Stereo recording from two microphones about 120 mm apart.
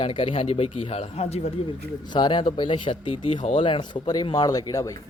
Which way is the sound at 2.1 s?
40° left (ahead or behind).